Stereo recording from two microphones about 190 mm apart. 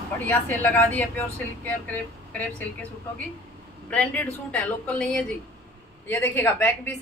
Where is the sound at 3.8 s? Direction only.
5° left (ahead or behind).